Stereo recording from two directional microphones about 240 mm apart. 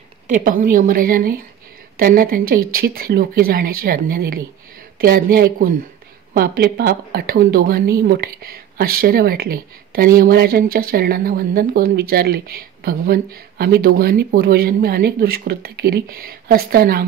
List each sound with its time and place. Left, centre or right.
0.3 s speech: right